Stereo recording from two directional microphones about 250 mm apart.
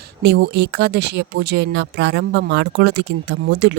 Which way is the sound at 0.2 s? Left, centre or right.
Right.